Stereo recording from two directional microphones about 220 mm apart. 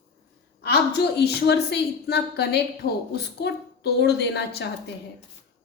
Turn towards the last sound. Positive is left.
turn(degrees=50)  # may be behind; listen again after turning